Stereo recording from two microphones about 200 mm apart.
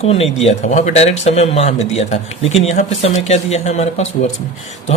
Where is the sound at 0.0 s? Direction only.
30° left (ahead or behind).